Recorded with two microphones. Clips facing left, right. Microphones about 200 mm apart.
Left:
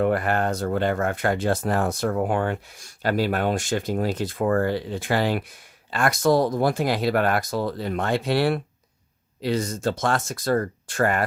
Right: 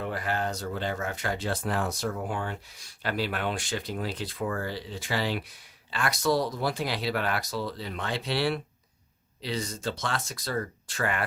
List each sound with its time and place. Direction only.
0.0 s speech: 60° left (ahead or behind)